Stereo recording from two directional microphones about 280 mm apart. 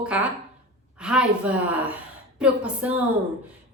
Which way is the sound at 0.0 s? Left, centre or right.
Centre.